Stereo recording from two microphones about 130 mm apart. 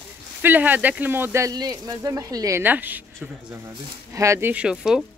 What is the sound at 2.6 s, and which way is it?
Speech, 15° right (ahead or behind).